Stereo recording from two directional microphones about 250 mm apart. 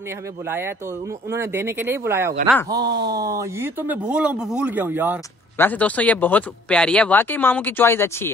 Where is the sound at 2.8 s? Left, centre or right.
Right.